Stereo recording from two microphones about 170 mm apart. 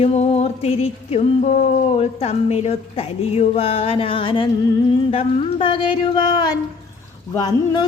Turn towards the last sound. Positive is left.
turn(degrees=25)  # may be behind; listen again after turning